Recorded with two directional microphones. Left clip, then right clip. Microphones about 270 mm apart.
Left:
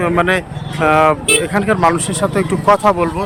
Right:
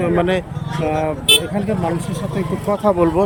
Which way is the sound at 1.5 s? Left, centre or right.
Centre.